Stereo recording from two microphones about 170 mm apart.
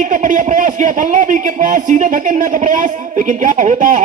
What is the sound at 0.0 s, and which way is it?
A man's voice, 50° right (ahead or behind).